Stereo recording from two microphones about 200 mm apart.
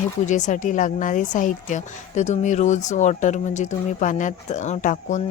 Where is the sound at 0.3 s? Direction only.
35° left (ahead or behind).